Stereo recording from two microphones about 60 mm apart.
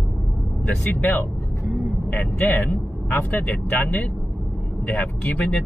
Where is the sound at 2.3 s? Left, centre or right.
Left.